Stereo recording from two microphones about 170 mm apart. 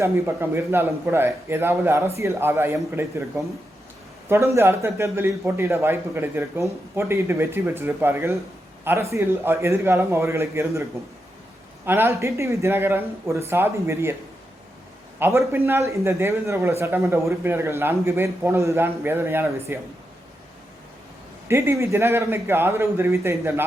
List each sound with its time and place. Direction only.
0.0 s a man's voice: 15° right (ahead or behind)
4.3 s a man's voice: 15° right (ahead or behind)
11.9 s a man's voice: 15° right (ahead or behind)
15.2 s a man's voice: 15° right (ahead or behind)
21.4 s a man's voice: 15° right (ahead or behind)